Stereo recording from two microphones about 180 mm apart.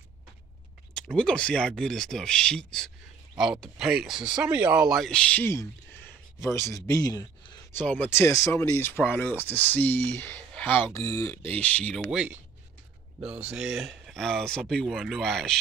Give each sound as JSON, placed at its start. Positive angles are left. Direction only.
{"t": 0.9, "sound": "speech", "side_deg": 5}
{"t": 7.7, "sound": "speech", "side_deg": 10}
{"t": 12.1, "sound": "speech", "side_deg": -5}
{"t": 13.2, "sound": "speech", "side_deg": -35}
{"t": 13.5, "sound": "speech", "side_deg": 0}